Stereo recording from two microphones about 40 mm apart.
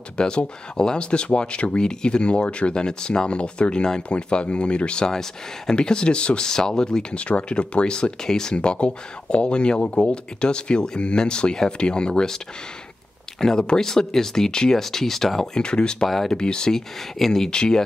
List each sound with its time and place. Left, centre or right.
0.2 s speech: left
7.2 s speech: left
8.5 s speech: left
13.4 s speech: centre
15.6 s speech: left
17.5 s speech: centre